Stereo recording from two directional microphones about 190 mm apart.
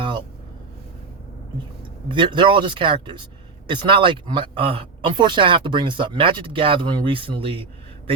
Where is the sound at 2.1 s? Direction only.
25° right (ahead or behind).